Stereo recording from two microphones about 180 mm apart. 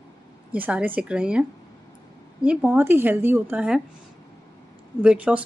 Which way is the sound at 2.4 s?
5° right (ahead or behind).